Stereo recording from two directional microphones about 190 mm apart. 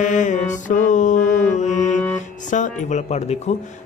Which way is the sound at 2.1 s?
40° left (ahead or behind).